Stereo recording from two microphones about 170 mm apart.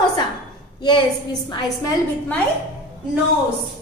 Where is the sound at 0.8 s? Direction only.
25° left (ahead or behind).